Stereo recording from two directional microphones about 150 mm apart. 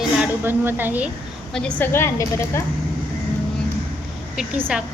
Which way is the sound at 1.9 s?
15° left (ahead or behind).